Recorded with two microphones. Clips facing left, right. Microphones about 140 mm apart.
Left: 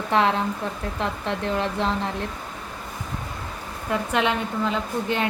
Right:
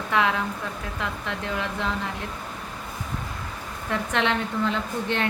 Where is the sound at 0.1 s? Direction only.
35° left (ahead or behind).